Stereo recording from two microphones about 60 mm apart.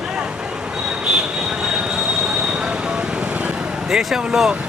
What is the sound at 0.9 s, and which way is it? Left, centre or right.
Train, centre.